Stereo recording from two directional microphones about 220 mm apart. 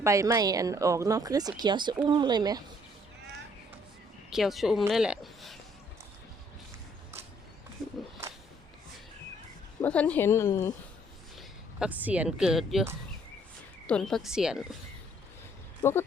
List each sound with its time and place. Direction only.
0.0 s speech: 15° right (ahead or behind)
4.3 s speech: centre (ahead or behind)
9.8 s a woman's voice: 5° left (ahead or behind)
11.3 s a woman's voice: 5° right (ahead or behind)
15.8 s speech: 10° left (ahead or behind)